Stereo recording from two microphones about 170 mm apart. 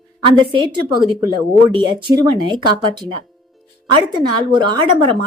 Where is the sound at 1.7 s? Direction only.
30° right (ahead or behind).